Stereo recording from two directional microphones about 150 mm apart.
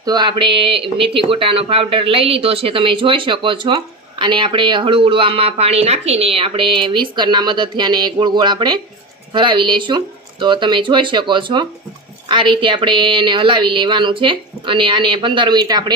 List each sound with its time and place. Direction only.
0.0 s speech: 30° right (ahead or behind)